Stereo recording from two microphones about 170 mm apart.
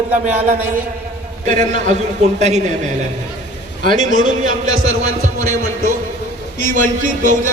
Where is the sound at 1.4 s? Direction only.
50° right (ahead or behind).